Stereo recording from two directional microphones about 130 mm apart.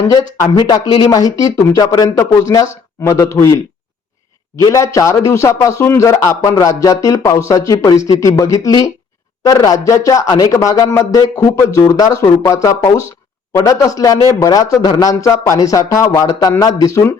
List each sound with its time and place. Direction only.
0.1 s a man's voice: 30° left (ahead or behind)
4.6 s a man's voice: 25° left (ahead or behind)